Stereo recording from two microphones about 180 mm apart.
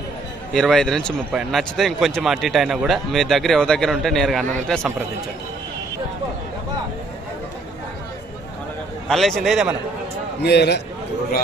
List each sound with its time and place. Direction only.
0.5 s speech: 5° left (ahead or behind)
9.0 s speech: centre (ahead or behind)
10.4 s a man's voice: 70° left (ahead or behind)